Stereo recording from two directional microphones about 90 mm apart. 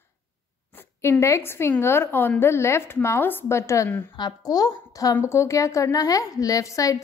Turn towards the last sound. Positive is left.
turn(degrees=35)  # may be behind; listen again after turning